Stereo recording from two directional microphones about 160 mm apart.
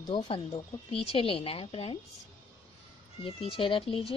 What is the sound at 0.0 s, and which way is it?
A woman's voice, 35° left (ahead or behind).